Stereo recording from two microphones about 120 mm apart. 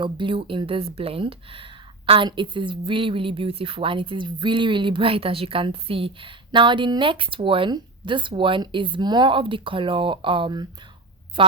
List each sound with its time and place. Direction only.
0.0 s speech: 45° right (ahead or behind)